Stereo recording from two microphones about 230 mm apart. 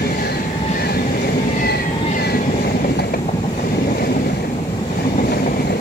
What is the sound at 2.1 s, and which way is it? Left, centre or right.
Vehicle, left.